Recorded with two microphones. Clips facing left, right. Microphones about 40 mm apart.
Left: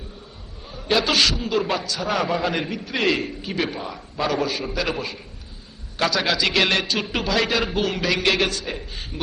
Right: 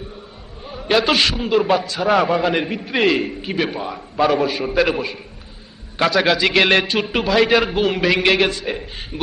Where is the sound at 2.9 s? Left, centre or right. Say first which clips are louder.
Right 5 dB; centre.